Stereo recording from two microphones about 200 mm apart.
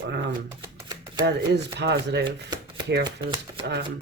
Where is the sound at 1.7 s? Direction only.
60° right (ahead or behind).